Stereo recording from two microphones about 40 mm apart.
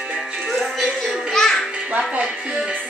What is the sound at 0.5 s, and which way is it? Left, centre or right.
Music, centre.